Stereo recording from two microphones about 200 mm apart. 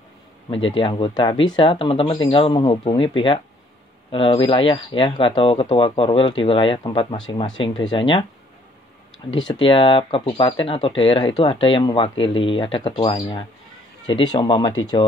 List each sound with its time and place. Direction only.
0.7 s speech: 25° left (ahead or behind)
9.3 s speech: 25° left (ahead or behind)